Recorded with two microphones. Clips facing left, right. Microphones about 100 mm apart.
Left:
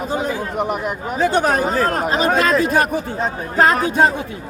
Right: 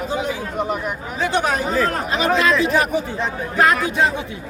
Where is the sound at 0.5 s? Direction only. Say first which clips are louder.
Left 1 dB; 60° left (ahead or behind).